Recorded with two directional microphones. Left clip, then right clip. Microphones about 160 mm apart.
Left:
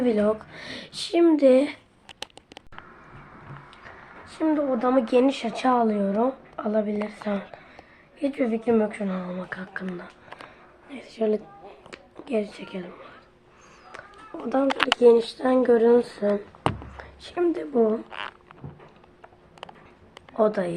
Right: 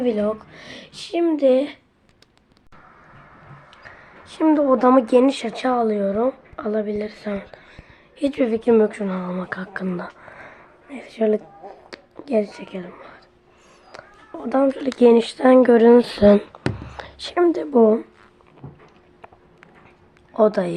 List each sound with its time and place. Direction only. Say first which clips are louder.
0.0 s speech: right 1 dB; centre (ahead or behind)
4.4 s speech: right 7 dB; 35° right (ahead or behind); by 7.6 s 15° right (ahead or behind)
8.2 s speech: right 5 dB; 30° right (ahead or behind)
11.2 s speech: right 5 dB; 20° right (ahead or behind)
12.6 s speech: right 3 dB; 5° right (ahead or behind)
14.4 s speech: right 5 dB; 15° right (ahead or behind)
14.8 s a woman's voice: right 2 dB; 35° right (ahead or behind)
20.3 s speech: right 5 dB; 30° right (ahead or behind)